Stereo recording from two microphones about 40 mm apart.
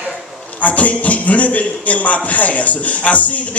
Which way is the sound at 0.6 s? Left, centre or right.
Left.